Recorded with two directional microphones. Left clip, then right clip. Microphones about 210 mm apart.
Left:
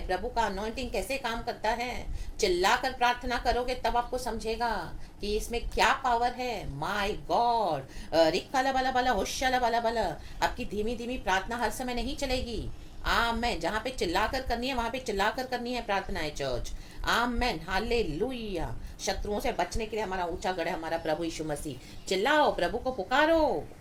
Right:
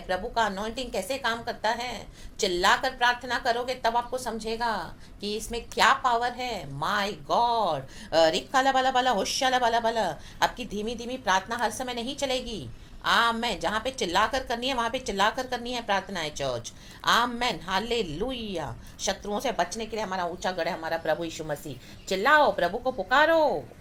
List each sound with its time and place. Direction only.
0.1 s a woman's voice: 15° right (ahead or behind)